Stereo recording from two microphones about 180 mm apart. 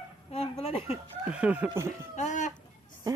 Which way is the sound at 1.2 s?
5° right (ahead or behind).